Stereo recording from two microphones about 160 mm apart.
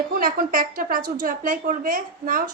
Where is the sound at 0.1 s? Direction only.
60° right (ahead or behind).